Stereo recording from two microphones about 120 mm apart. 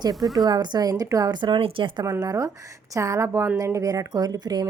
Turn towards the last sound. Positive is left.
turn(degrees=-30)  # may be behind; listen again after turning